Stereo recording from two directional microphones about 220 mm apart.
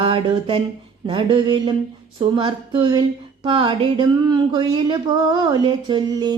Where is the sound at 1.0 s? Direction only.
20° right (ahead or behind).